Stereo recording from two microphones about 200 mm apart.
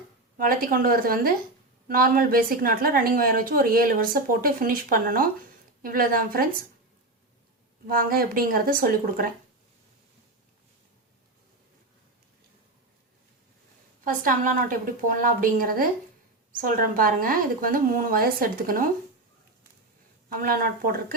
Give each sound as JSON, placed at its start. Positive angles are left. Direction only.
{"t": 0.3, "sound": "a woman's voice", "side_deg": -45}
{"t": 7.9, "sound": "a woman's voice", "side_deg": -45}
{"t": 14.0, "sound": "a woman's voice", "side_deg": -40}
{"t": 20.4, "sound": "a woman's voice", "side_deg": -45}